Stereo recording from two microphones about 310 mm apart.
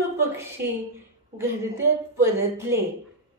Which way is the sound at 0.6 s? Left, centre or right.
Right.